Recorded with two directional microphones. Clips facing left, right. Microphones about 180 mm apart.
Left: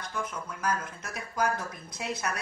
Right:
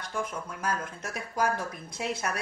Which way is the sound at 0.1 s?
25° right (ahead or behind).